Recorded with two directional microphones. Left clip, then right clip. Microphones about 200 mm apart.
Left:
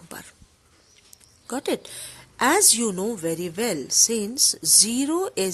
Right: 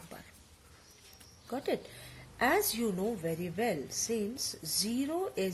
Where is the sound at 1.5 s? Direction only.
50° left (ahead or behind).